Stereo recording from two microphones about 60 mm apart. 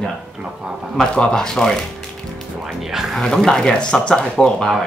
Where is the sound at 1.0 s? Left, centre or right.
Centre.